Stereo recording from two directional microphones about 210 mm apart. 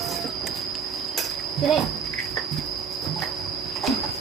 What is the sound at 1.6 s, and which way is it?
Speech, centre (ahead or behind).